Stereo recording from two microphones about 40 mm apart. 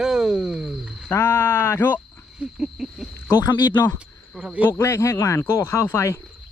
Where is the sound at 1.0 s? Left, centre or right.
Left.